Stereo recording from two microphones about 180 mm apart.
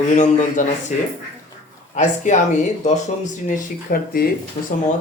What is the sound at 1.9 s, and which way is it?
Speech, 40° left (ahead or behind).